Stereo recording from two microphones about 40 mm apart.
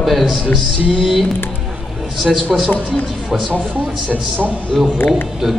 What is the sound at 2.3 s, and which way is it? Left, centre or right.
Speech, centre.